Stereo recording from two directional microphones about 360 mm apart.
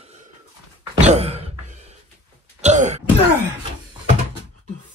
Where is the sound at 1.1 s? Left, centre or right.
Centre.